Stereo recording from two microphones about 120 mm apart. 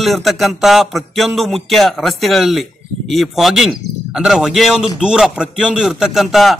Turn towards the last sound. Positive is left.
turn(degrees=0)  # may be behind; listen again after turning